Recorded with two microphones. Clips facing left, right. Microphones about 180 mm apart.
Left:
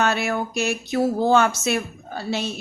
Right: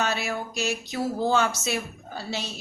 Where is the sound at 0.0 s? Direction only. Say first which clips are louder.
Left 6 dB; 55° left (ahead or behind).